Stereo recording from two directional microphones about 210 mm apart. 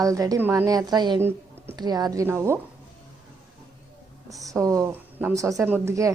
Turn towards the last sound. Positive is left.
turn(degrees=-15)  # may be behind; listen again after turning